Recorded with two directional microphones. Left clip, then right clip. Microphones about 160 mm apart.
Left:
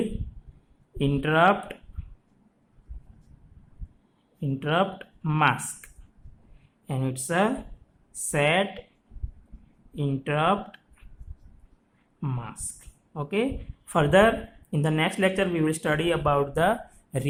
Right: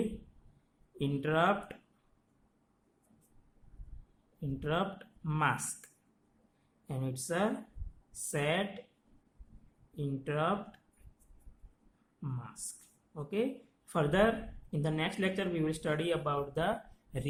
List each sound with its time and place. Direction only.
0.9 s speech: 25° left (ahead or behind)
4.4 s speech: 25° left (ahead or behind)
9.9 s speech: 20° left (ahead or behind)
12.2 s speech: 25° left (ahead or behind)